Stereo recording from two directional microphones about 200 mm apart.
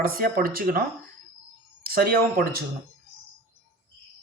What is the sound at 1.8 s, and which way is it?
Speech, 50° right (ahead or behind).